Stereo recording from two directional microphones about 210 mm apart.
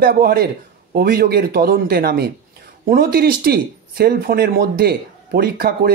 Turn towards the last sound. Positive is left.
turn(degrees=-45)  # may be behind; listen again after turning